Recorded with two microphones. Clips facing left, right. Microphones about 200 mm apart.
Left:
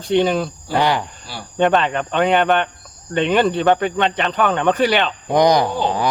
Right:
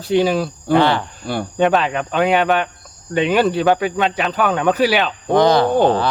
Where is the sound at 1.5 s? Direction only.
Centre (ahead or behind).